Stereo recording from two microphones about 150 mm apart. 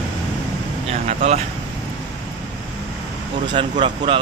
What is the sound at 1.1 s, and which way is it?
Speech, 45° right (ahead or behind).